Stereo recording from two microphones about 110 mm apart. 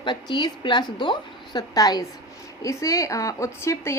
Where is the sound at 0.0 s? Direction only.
45° left (ahead or behind).